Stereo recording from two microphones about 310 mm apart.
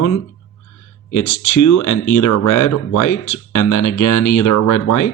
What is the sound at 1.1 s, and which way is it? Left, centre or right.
Speech, left.